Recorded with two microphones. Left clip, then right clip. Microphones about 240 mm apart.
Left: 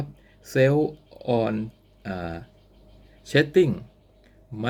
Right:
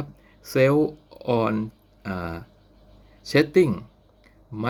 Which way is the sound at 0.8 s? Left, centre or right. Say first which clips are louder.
Right 2 dB; right.